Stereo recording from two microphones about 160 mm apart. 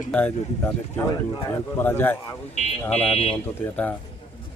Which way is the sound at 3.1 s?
40° left (ahead or behind).